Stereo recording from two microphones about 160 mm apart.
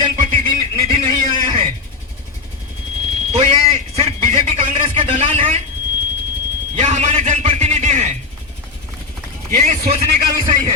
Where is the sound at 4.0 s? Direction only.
40° right (ahead or behind).